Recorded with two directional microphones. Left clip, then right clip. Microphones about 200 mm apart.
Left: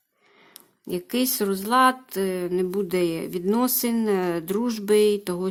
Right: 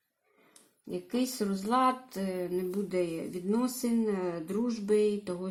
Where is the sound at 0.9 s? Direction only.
35° left (ahead or behind).